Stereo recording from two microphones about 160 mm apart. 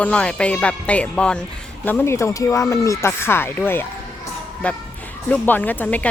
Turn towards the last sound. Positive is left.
turn(degrees=10)  # may be behind; listen again after turning